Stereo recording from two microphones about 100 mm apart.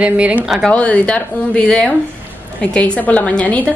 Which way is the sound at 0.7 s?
15° left (ahead or behind).